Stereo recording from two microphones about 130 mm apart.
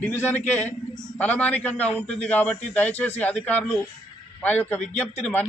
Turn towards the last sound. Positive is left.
turn(degrees=15)  # may be behind; listen again after turning